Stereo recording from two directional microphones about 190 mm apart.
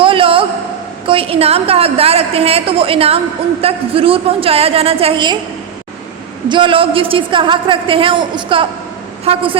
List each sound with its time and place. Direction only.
0.0 s a sound: 30° right (ahead or behind)
1.0 s a woman's voice: 30° right (ahead or behind)
6.5 s a woman's voice: 25° right (ahead or behind)